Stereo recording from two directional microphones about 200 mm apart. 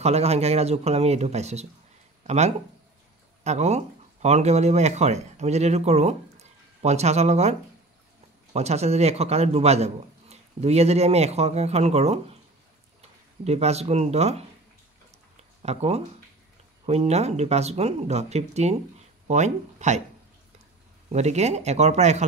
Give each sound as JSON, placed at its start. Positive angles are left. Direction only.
{"t": 0.0, "sound": "a man's voice", "side_deg": -30}
{"t": 8.5, "sound": "a man's voice", "side_deg": -30}
{"t": 13.4, "sound": "a man's voice", "side_deg": -30}
{"t": 15.6, "sound": "a man's voice", "side_deg": -30}
{"t": 21.1, "sound": "a man's voice", "side_deg": -35}